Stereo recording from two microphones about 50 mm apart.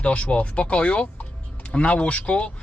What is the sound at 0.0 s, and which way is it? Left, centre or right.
Speech, left.